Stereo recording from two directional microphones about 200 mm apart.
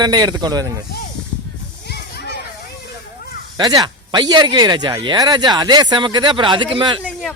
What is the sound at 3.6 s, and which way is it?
Speech, 20° right (ahead or behind).